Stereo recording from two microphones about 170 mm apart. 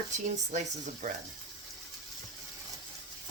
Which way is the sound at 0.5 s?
45° right (ahead or behind).